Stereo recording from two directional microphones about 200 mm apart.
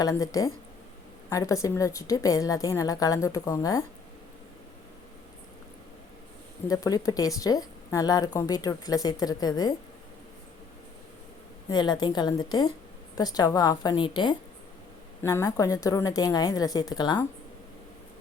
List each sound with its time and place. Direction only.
0.0 s speech: 15° left (ahead or behind)
6.7 s speech: 15° left (ahead or behind)
11.7 s a woman's voice: 20° left (ahead or behind)